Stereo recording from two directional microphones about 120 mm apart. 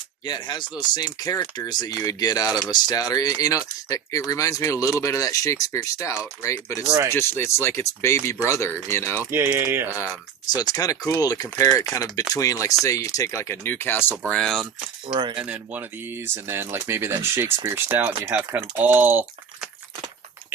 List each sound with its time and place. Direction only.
0.3 s speech: 40° left (ahead or behind); by 9.2 s 20° left (ahead or behind)
9.3 s speech: 20° right (ahead or behind)
9.9 s speech: 25° left (ahead or behind)
14.3 s speech: 5° left (ahead or behind)
15.0 s speech: 45° right (ahead or behind)
15.4 s speech: 10° right (ahead or behind)